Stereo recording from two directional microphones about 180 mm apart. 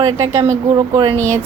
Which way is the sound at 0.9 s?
30° right (ahead or behind).